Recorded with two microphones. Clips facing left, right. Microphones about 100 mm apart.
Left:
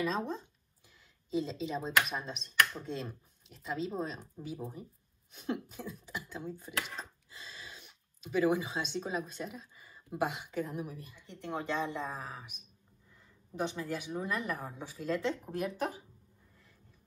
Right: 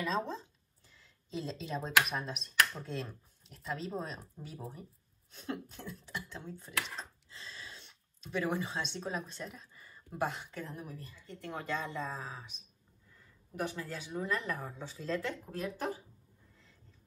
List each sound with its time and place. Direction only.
0.0 s speech: 15° left (ahead or behind)
13.6 s speech: 20° left (ahead or behind)